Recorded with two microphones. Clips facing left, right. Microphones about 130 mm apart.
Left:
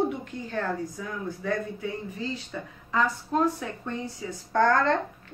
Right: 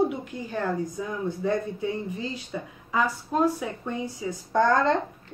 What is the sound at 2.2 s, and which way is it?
Speech, 15° right (ahead or behind).